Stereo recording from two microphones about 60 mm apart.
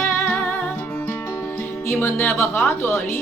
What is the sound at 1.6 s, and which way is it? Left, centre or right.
Music, left.